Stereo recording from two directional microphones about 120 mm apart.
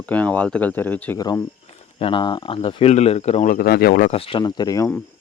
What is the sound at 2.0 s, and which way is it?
Speech, 45° left (ahead or behind).